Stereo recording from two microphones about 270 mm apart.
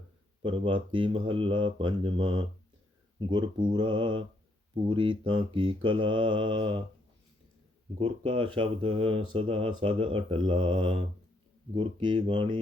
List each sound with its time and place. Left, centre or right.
0.4 s speech: centre
7.9 s speech: centre